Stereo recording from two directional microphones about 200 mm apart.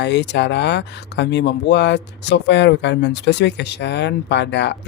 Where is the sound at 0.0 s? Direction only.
60° left (ahead or behind).